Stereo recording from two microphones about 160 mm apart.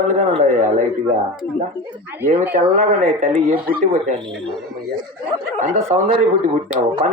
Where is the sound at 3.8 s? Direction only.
50° right (ahead or behind).